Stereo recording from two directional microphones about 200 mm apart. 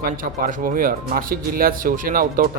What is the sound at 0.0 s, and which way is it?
Speech, 45° right (ahead or behind).